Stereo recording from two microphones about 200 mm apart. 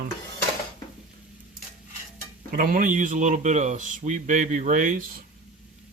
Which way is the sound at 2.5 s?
45° right (ahead or behind).